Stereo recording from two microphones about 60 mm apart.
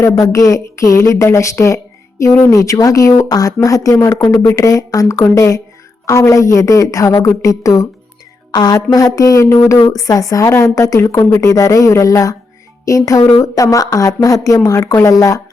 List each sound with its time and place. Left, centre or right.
0.0 s speech: left
4.5 s speech: left
8.5 s speech: left
10.5 s speech: left